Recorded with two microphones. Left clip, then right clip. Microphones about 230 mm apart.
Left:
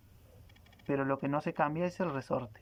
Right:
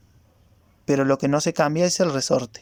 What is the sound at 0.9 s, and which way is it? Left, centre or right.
Speech, right.